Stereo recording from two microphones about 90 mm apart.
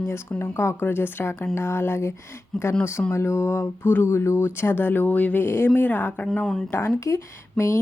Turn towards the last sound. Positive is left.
turn(degrees=30)  # may be behind; listen again after turning